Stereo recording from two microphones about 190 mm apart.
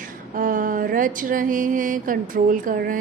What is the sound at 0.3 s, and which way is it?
A woman's voice, 45° right (ahead or behind).